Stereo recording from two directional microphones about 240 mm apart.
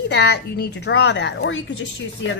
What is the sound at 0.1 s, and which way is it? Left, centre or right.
A woman's voice, left.